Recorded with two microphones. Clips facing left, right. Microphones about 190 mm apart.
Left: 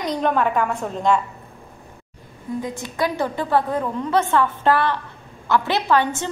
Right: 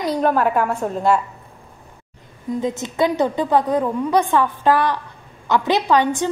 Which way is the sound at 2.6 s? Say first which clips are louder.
Right 5 dB; 20° right (ahead or behind).